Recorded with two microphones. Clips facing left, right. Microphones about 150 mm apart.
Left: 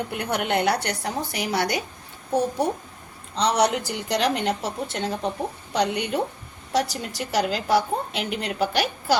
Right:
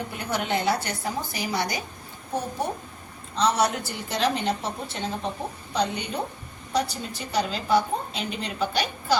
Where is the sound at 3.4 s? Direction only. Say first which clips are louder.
Left 2 dB; 75° left (ahead or behind).